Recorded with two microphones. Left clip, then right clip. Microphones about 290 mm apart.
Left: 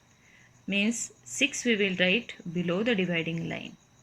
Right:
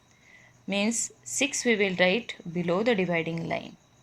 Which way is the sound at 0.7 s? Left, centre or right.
Centre.